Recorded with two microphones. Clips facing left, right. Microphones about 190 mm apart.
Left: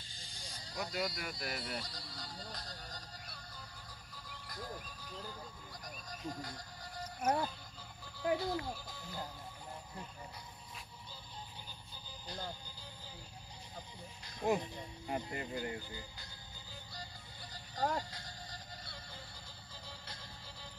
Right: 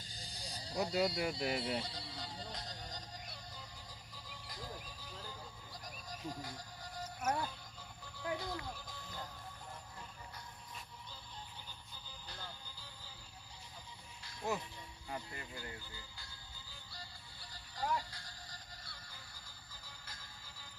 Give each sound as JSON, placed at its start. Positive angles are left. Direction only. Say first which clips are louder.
{"t": 0.0, "sound": "a sound", "louder": "right 3 dB", "side_deg": -35}
{"t": 6.0, "sound": "train", "louder": "left 1 dB", "side_deg": -5}
{"t": 8.2, "sound": "speech", "louder": "left 6 dB", "side_deg": 10}
{"t": 14.2, "sound": "music", "louder": "left 6 dB", "side_deg": 15}
{"t": 15.0, "sound": "speech", "louder": "left 6 dB", "side_deg": 20}
{"t": 16.9, "sound": "music", "louder": "left 2 dB", "side_deg": 20}
{"t": 17.7, "sound": "speech", "louder": "left 3 dB", "side_deg": 50}
{"t": 18.1, "sound": "music", "louder": "left 5 dB", "side_deg": 20}